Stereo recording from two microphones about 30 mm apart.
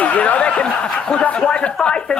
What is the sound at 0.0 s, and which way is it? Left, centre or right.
Snicker, left.